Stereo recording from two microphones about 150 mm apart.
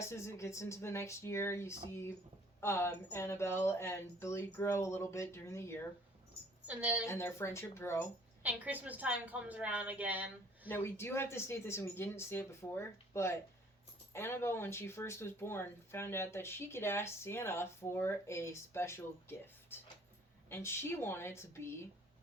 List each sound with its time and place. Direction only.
0.0 s speech: 20° left (ahead or behind)
6.7 s a woman's voice: 10° right (ahead or behind)
7.1 s speech: 15° left (ahead or behind)
8.4 s a woman's voice: 10° right (ahead or behind)
10.7 s speech: 15° left (ahead or behind)